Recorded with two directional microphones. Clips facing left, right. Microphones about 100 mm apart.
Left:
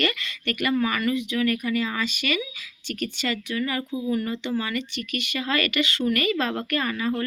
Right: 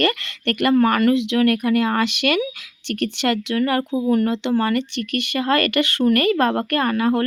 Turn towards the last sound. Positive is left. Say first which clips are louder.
# right 7 dB
turn(degrees=-60)  # may be behind; listen again after turning